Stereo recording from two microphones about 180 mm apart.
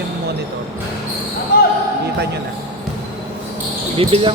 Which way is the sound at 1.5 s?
55° left (ahead or behind).